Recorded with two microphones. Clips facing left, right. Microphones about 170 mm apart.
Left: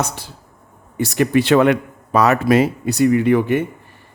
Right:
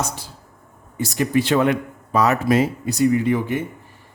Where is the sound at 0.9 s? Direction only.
65° left (ahead or behind).